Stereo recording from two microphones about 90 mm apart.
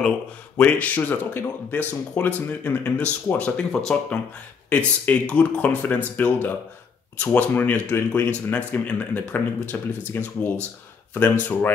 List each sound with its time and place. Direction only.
0.6 s speech: 15° left (ahead or behind)
4.6 s speech: 15° left (ahead or behind)